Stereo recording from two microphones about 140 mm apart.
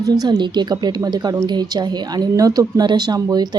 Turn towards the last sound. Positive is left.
turn(degrees=-30)  # may be behind; listen again after turning